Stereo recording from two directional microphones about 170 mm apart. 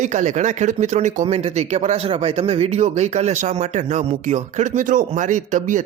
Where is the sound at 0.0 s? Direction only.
45° right (ahead or behind).